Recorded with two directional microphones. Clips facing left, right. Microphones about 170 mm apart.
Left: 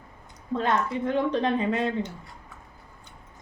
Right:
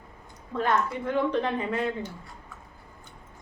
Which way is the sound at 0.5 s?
20° left (ahead or behind).